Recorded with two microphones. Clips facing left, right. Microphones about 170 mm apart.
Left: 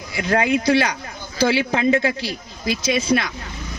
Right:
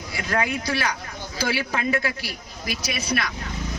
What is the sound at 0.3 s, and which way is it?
A man's voice, 25° left (ahead or behind).